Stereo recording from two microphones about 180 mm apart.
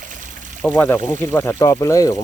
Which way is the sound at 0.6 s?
10° left (ahead or behind).